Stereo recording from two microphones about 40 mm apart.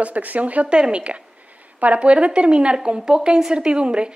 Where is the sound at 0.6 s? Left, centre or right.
Right.